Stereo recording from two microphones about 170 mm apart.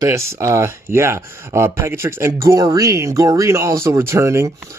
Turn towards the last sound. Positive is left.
turn(degrees=-15)  # may be behind; listen again after turning